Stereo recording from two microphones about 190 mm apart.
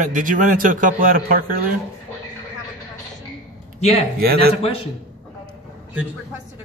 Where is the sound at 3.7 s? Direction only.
35° left (ahead or behind).